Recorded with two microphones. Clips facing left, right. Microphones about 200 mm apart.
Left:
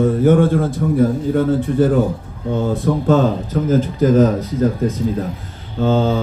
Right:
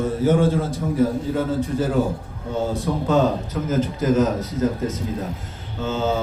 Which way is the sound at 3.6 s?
35° left (ahead or behind).